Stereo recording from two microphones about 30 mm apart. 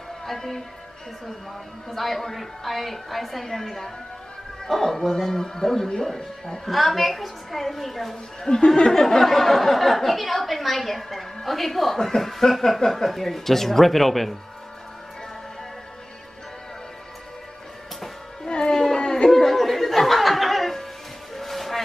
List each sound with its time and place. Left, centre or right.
0.3 s speech: centre
1.9 s speech: centre
6.6 s speech: centre
8.4 s speech: centre
8.9 s speech: centre
18.7 s a sound: centre
18.9 s a sound: left
19.3 s music: centre
21.4 s a sound: centre